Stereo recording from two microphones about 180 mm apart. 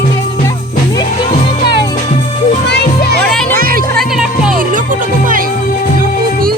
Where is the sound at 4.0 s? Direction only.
Centre (ahead or behind).